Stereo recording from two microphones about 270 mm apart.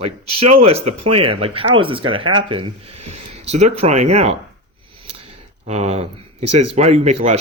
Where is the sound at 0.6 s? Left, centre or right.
Right.